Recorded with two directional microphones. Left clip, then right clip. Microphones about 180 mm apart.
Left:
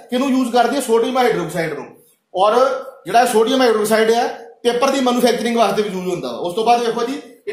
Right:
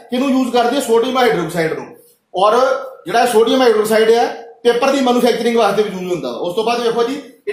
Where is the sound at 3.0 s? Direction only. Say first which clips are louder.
Right 1 dB; 40° left (ahead or behind).